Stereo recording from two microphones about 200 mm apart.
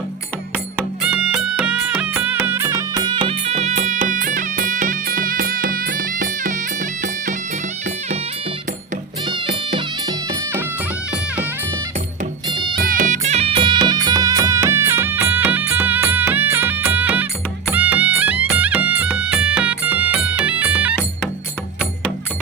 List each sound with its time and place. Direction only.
1.0 s music: 5° right (ahead or behind); by 7.3 s 40° right (ahead or behind)
9.2 s music: 25° right (ahead or behind)
10.2 s music: 10° right (ahead or behind)
12.8 s music: 40° right (ahead or behind); by 20.9 s 5° right (ahead or behind)